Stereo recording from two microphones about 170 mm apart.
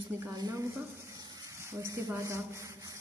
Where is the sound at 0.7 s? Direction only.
20° right (ahead or behind).